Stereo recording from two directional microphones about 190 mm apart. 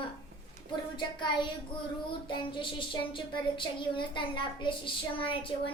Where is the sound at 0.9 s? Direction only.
25° left (ahead or behind).